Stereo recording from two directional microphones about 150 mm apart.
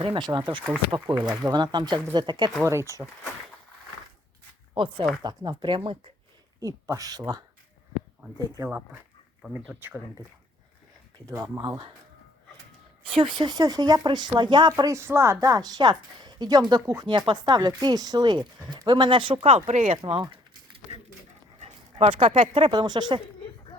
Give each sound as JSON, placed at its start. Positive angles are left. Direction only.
{"t": 0.0, "sound": "speech", "side_deg": -30}
{"t": 2.6, "sound": "speech", "side_deg": -20}
{"t": 4.7, "sound": "speech", "side_deg": -35}
{"t": 6.6, "sound": "speech", "side_deg": -20}
{"t": 9.4, "sound": "speech", "side_deg": -5}
{"t": 11.3, "sound": "speech", "side_deg": -25}
{"t": 13.1, "sound": "speech", "side_deg": -35}
{"t": 21.6, "sound": "speech", "side_deg": -45}